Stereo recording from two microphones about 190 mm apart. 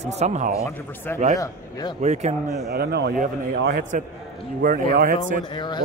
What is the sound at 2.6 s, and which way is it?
Speech, 55° right (ahead or behind).